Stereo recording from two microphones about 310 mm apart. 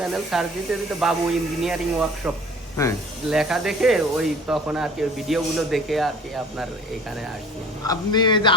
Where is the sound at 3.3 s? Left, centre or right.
Centre.